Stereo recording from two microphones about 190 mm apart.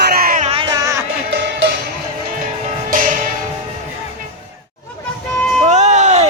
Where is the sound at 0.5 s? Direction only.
25° right (ahead or behind).